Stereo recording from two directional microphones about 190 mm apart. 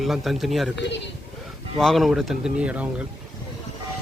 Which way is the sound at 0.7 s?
65° left (ahead or behind).